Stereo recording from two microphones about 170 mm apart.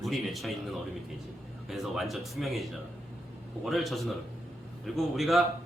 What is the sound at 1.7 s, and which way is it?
Speech, centre (ahead or behind).